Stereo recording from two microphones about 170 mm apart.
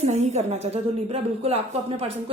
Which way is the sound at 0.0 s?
40° right (ahead or behind).